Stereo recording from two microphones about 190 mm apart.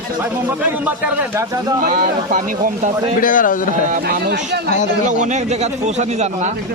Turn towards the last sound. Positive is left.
turn(degrees=-35)  # may be behind; listen again after turning